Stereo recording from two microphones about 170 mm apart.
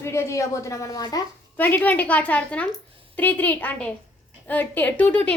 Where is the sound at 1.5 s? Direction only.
10° left (ahead or behind).